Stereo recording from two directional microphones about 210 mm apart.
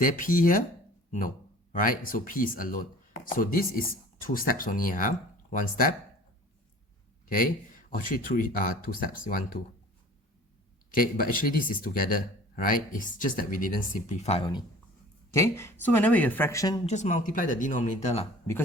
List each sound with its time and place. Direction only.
0.0 s speech: 40° left (ahead or behind)
1.7 s speech: 40° left (ahead or behind)
7.3 s speech: 40° left (ahead or behind)
10.9 s speech: 40° left (ahead or behind); by 14.6 s 25° left (ahead or behind)
15.3 s speech: 15° left (ahead or behind)
16.8 s speech: 35° left (ahead or behind)